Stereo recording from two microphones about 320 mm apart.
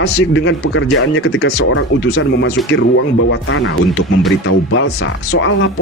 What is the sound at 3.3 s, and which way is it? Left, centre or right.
Speech, left.